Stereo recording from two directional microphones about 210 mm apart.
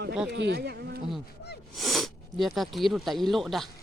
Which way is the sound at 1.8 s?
Centre (ahead or behind).